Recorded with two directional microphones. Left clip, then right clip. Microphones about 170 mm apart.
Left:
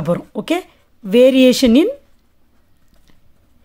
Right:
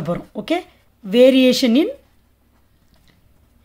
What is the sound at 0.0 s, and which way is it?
Speech, 30° left (ahead or behind).